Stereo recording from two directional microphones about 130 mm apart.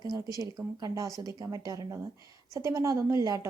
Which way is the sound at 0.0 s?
30° right (ahead or behind).